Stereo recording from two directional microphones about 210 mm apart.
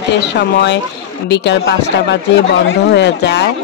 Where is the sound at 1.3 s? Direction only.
55° left (ahead or behind).